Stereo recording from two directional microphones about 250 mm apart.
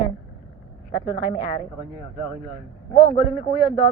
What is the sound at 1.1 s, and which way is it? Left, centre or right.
Speech, left.